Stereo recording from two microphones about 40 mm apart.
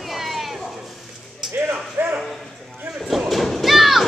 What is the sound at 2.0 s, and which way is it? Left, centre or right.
Bow-wow, right.